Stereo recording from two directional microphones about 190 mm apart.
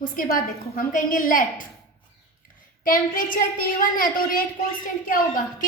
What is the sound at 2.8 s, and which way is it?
A woman's voice, 45° left (ahead or behind).